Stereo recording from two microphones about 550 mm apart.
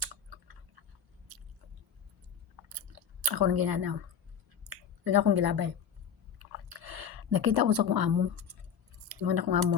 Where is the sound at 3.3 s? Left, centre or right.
Right.